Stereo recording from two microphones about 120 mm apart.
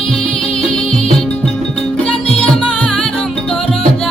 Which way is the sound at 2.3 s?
5° left (ahead or behind).